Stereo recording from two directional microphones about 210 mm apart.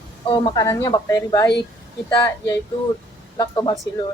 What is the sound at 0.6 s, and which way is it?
Speech, 15° left (ahead or behind).